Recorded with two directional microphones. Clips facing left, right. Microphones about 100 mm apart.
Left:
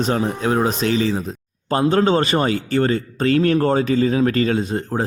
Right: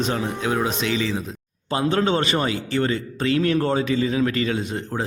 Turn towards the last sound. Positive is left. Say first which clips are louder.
# left 5 dB
turn(degrees=35)  # may be behind; listen again after turning